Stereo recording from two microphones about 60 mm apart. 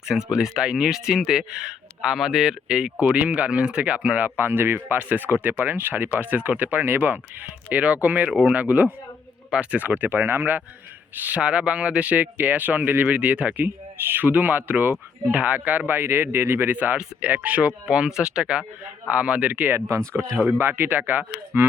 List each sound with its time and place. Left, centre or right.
0.0 s speech: centre
3.0 s speech: right
4.4 s speech: right
4.9 s speech: right
8.3 s speech: centre
8.5 s speech: right
11.3 s speech: centre
17.8 s speech: centre
19.9 s speech: right
20.6 s speech: right